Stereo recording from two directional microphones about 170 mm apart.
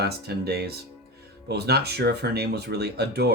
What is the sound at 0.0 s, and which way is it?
Speech, 70° right (ahead or behind).